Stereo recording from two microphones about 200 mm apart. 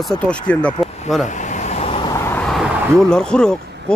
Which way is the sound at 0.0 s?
5° left (ahead or behind).